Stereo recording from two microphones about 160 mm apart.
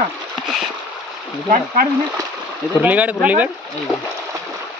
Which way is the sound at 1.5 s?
60° right (ahead or behind).